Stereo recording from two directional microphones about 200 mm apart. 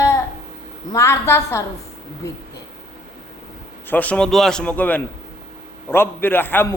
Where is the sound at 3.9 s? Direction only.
5° left (ahead or behind).